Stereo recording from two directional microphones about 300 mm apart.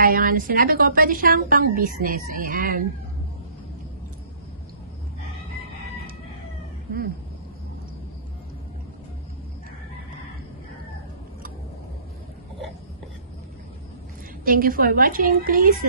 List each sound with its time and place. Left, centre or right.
0.0 s a woman's voice: right
14.4 s a woman's voice: right